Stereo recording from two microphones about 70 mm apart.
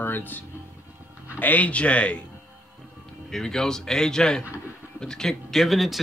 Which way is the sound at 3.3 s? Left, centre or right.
Centre.